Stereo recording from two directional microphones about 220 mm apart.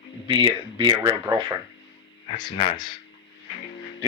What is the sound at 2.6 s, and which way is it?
Speech, 25° left (ahead or behind).